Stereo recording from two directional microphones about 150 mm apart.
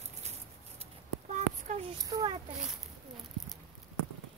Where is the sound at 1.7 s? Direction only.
50° right (ahead or behind).